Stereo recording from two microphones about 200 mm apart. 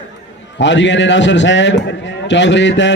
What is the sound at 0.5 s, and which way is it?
A man's voice, 65° left (ahead or behind).